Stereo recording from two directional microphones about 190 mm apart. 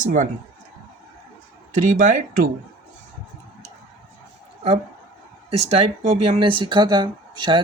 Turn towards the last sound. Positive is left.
turn(degrees=-25)  # may be behind; listen again after turning